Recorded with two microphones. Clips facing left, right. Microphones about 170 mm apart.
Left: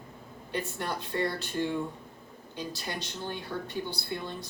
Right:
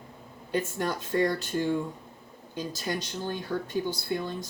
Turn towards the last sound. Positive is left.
turn(degrees=-45)  # may be behind; listen again after turning